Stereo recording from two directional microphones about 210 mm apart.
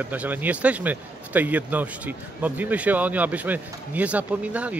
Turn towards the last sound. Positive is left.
turn(degrees=-5)  # may be behind; listen again after turning